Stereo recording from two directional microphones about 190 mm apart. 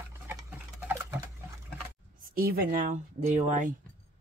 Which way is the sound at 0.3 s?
10° right (ahead or behind).